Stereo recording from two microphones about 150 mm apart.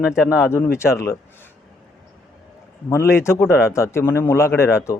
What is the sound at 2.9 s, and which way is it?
A man's voice, 15° left (ahead or behind).